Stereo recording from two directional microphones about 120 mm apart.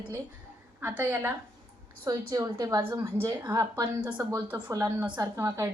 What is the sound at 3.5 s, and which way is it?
Speech, 25° right (ahead or behind).